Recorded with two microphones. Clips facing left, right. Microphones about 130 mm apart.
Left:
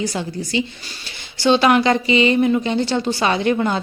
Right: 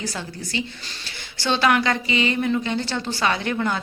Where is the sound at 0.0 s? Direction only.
15° left (ahead or behind).